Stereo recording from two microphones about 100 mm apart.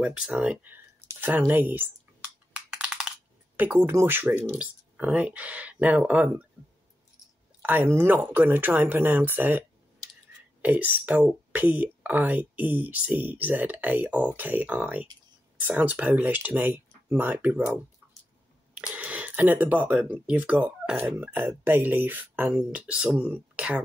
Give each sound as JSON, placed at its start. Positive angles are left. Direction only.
{"t": 0.0, "sound": "speech", "side_deg": -10}
{"t": 2.5, "sound": "typing", "side_deg": -10}
{"t": 3.5, "sound": "speech", "side_deg": -20}
{"t": 7.6, "sound": "speech", "side_deg": -20}
{"t": 18.0, "sound": "a sound", "side_deg": -25}
{"t": 18.9, "sound": "speech", "side_deg": -15}